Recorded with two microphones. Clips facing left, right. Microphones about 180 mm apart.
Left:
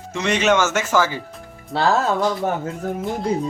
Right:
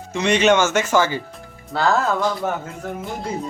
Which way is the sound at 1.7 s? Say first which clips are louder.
Left 1 dB; 30° left (ahead or behind).